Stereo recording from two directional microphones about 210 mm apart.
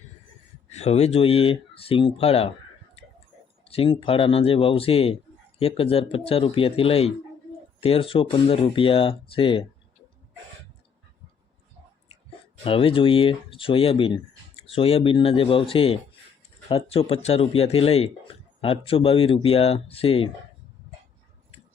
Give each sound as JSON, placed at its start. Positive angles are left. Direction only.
{"t": 0.7, "sound": "speech", "side_deg": 30}
{"t": 3.6, "sound": "speech", "side_deg": 25}
{"t": 12.6, "sound": "a man's voice", "side_deg": 25}